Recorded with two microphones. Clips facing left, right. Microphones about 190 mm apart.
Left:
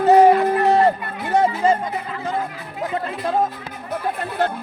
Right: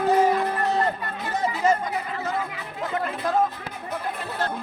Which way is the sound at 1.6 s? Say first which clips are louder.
Even; 30° left (ahead or behind).